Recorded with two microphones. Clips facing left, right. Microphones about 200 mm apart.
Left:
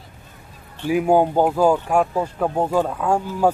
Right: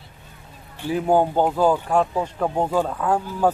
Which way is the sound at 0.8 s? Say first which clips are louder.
Left 2 dB; 10° left (ahead or behind).